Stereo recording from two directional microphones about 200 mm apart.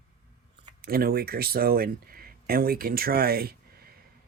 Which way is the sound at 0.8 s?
50° right (ahead or behind).